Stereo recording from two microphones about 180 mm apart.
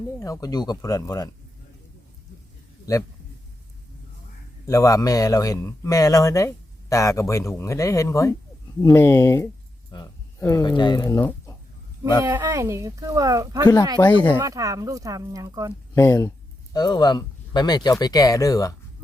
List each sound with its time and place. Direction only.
0.2 s speech: 20° left (ahead or behind)
4.6 s speech: 20° left (ahead or behind)
12.2 s speech: 15° right (ahead or behind)
14.0 s speech: 10° left (ahead or behind)
14.3 s speech: 20° right (ahead or behind)
16.0 s speech: 15° left (ahead or behind)